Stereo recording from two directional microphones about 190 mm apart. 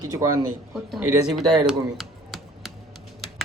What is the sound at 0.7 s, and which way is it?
Speech, centre (ahead or behind).